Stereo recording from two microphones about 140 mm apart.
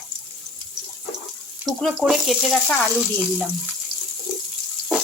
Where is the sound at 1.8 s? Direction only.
Centre (ahead or behind).